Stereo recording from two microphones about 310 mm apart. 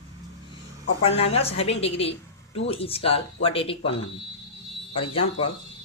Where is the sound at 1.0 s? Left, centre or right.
Centre.